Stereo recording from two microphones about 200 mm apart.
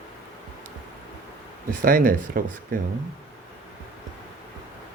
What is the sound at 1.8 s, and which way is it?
Speech, 45° right (ahead or behind).